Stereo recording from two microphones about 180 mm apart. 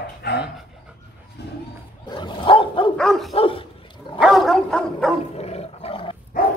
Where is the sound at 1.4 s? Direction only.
65° left (ahead or behind).